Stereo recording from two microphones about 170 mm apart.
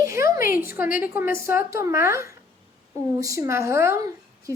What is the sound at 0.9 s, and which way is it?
A woman's voice, 10° right (ahead or behind).